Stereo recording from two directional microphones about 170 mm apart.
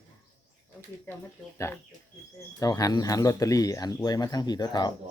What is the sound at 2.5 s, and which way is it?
Speech, 20° left (ahead or behind).